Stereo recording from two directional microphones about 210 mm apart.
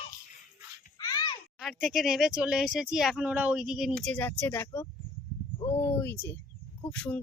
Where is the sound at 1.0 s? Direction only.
15° left (ahead or behind).